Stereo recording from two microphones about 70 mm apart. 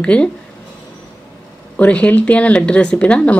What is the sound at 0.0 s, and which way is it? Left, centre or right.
Speech, centre.